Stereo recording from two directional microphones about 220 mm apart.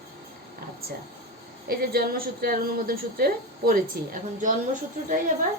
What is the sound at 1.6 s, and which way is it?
A woman's voice, 45° right (ahead or behind).